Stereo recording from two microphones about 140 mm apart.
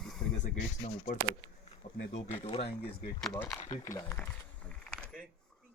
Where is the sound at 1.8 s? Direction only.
60° left (ahead or behind).